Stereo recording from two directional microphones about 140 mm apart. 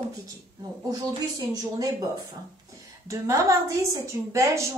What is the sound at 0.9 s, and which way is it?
A woman's voice, 25° right (ahead or behind).